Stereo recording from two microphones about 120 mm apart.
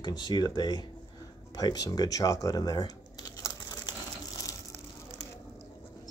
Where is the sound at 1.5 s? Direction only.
35° left (ahead or behind).